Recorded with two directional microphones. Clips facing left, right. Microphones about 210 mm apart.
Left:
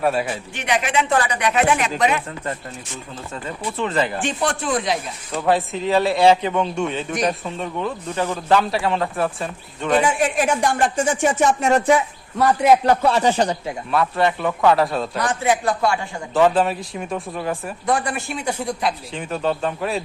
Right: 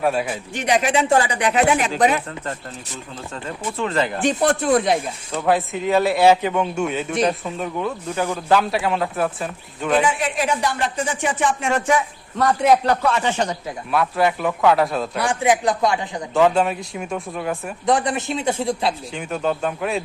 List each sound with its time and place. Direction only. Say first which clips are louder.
0.0 s speech: even; centre (ahead or behind)
0.5 s speech: right 3 dB; 40° right (ahead or behind)
3.8 s speech: even; centre (ahead or behind)
4.2 s speech: right 4 dB; 40° right (ahead or behind)
5.3 s speech: even; centre (ahead or behind)
10.0 s speech: left 2 dB; 45° left (ahead or behind)
12.4 s a man's voice: left 1 dB; 10° left (ahead or behind)
13.0 s speech: left 3 dB; 35° left (ahead or behind)
13.9 s speech: even; centre (ahead or behind)
15.2 s speech: right 2 dB; 15° right (ahead or behind)
16.3 s speech: even; centre (ahead or behind)
17.8 s speech: right 3 dB; 20° right (ahead or behind)
19.1 s speech: even; centre (ahead or behind)